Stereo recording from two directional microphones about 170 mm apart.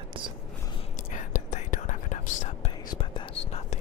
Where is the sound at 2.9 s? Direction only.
30° left (ahead or behind).